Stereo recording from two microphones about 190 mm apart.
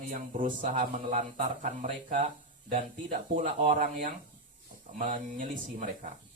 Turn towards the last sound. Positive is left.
turn(degrees=-45)  # may be behind; listen again after turning